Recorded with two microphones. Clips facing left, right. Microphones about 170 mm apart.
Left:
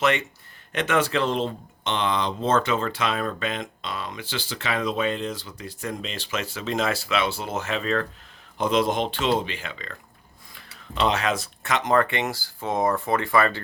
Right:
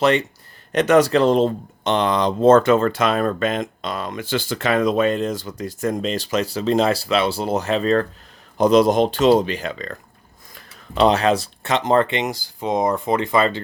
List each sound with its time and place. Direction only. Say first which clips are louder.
0.0 s speech: right 6 dB; 35° right (ahead or behind)